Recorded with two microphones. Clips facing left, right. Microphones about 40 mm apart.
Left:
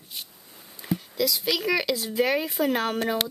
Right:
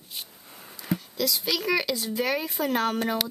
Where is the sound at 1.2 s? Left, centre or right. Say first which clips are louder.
Left 3 dB; centre.